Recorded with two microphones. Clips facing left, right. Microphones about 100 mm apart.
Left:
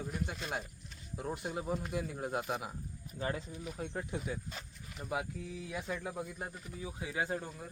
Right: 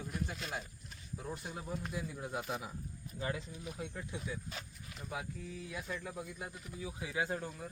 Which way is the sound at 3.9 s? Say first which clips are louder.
Left 4 dB; 50° left (ahead or behind).